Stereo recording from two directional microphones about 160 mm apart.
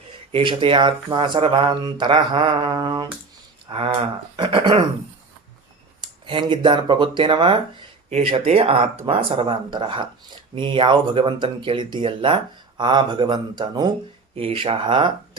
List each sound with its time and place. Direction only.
0.3 s speech: 35° right (ahead or behind)
6.0 s speech: 30° right (ahead or behind)